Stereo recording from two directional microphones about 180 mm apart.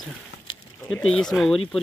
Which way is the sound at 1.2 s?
5° left (ahead or behind).